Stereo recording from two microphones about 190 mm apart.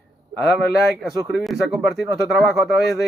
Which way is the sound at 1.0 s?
Centre (ahead or behind).